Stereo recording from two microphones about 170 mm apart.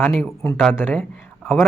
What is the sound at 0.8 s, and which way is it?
Speech, 10° left (ahead or behind).